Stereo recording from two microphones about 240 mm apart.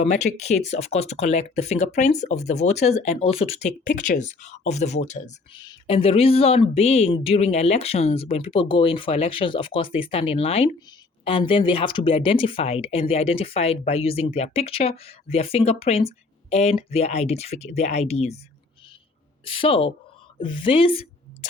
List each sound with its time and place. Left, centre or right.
0.0 s speech: left
19.5 s speech: left